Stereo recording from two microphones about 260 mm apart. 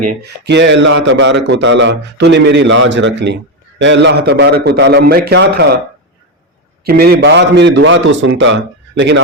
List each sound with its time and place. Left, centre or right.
0.2 s a man's voice: right
6.8 s a man's voice: right